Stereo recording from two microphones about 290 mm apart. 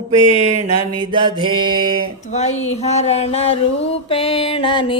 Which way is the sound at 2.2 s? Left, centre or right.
Left.